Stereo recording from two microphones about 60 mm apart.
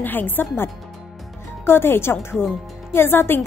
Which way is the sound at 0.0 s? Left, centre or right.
Left.